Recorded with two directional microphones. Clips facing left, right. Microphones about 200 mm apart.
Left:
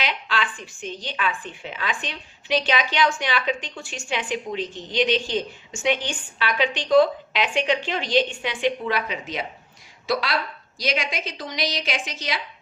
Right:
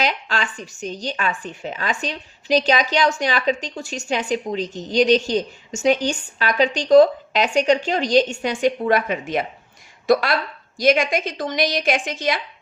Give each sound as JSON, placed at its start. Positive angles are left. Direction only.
{"t": 0.0, "sound": "a woman's voice", "side_deg": -45}